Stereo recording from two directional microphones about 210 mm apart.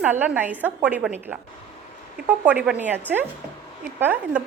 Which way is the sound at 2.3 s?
5° right (ahead or behind).